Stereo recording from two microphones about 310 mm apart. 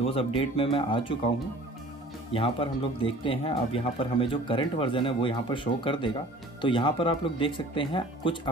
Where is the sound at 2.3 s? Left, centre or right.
Centre.